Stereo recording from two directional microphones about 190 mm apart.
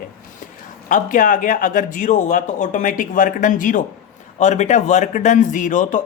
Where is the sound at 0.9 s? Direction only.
45° left (ahead or behind).